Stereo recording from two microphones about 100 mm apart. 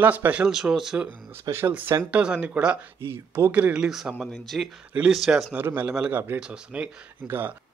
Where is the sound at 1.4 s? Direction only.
25° right (ahead or behind).